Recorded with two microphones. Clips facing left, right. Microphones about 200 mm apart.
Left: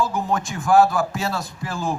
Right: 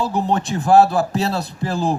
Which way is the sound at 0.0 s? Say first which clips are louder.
Right 3 dB; 35° right (ahead or behind).